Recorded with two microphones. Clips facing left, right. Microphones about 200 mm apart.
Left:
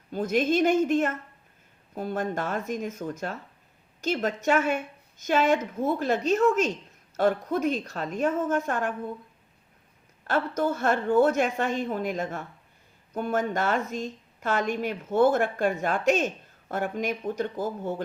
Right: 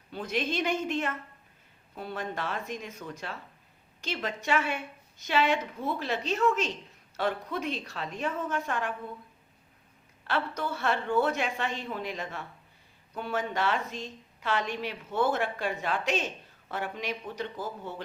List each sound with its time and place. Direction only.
0.1 s a woman's voice: 45° left (ahead or behind)
10.2 s a woman's voice: 45° left (ahead or behind)